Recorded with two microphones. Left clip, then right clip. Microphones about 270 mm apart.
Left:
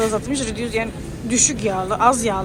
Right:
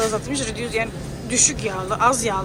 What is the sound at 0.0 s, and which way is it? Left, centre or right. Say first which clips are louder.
A man's voice: left 2 dB; centre.